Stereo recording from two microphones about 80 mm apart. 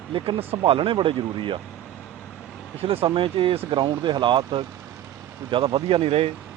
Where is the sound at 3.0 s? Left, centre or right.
Right.